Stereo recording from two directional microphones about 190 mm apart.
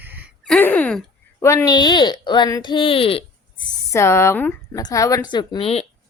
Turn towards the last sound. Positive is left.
turn(degrees=30)  # may be behind; listen again after turning